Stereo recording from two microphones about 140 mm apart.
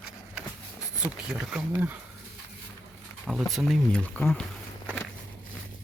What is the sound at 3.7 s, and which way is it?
Speech, 10° left (ahead or behind).